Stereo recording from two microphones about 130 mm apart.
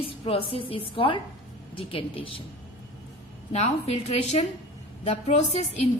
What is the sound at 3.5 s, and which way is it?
A woman's voice, 60° left (ahead or behind).